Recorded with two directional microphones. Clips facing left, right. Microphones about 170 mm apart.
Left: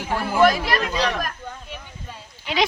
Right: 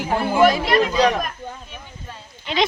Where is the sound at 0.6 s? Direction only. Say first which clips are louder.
Right 6 dB; centre (ahead or behind).